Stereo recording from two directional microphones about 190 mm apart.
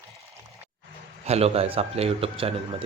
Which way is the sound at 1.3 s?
35° right (ahead or behind).